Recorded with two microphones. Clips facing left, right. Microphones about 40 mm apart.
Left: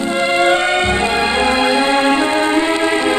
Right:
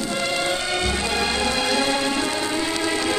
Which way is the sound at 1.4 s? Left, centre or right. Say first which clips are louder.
Left 8 dB; left.